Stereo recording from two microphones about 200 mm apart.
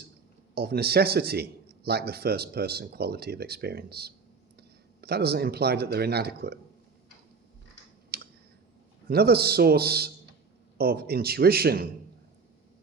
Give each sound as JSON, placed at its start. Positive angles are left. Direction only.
{"t": 0.5, "sound": "speech", "side_deg": -50}
{"t": 8.1, "sound": "clicking", "side_deg": -50}
{"t": 9.0, "sound": "speech", "side_deg": -50}